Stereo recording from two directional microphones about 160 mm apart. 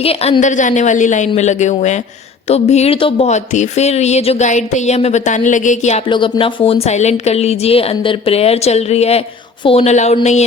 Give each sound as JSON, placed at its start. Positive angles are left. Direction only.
{"t": 0.0, "sound": "speech", "side_deg": 40}
{"t": 6.1, "sound": "a woman's voice", "side_deg": 30}
{"t": 6.8, "sound": "a woman's voice", "side_deg": 45}